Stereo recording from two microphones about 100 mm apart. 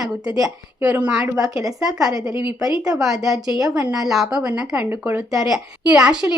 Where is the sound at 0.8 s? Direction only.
10° right (ahead or behind).